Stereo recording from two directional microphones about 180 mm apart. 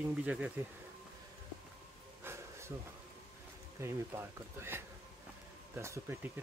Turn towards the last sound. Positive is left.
turn(degrees=-15)  # may be behind; listen again after turning